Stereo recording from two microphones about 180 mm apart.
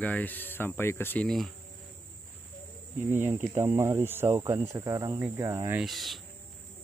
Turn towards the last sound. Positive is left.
turn(degrees=0)  # may be behind; listen again after turning